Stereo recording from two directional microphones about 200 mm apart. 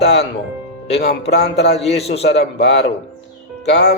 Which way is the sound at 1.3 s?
55° left (ahead or behind).